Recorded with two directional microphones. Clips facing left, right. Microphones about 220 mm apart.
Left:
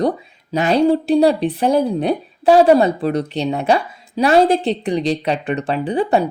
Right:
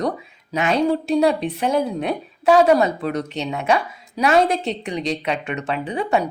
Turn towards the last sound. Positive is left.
turn(degrees=30)  # may be behind; listen again after turning